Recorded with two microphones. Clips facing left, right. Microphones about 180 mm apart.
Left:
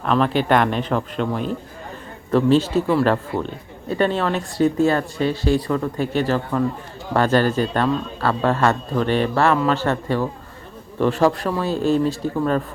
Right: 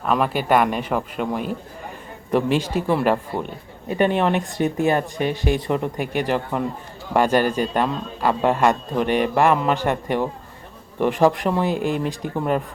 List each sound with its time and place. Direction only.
0.0 s speech: 10° right (ahead or behind)